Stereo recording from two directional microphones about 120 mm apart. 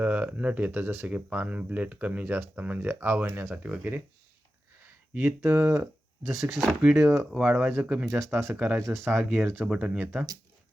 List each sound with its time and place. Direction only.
0.0 s speech: 15° right (ahead or behind)
8.3 s speech: 20° right (ahead or behind)